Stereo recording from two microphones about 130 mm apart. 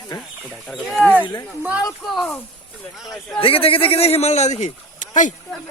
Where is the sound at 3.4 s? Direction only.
45° left (ahead or behind); by 5.3 s 75° left (ahead or behind).